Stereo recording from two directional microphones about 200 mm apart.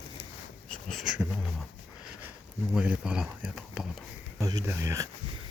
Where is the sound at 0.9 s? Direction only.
Centre (ahead or behind).